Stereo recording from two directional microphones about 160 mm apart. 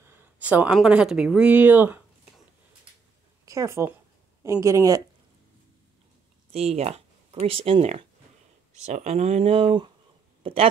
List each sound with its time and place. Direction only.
0.0 s a sound: 15° right (ahead or behind)
0.7 s speech: 5° right (ahead or behind)
3.4 s speech: 20° right (ahead or behind)
6.5 s speech: 40° right (ahead or behind)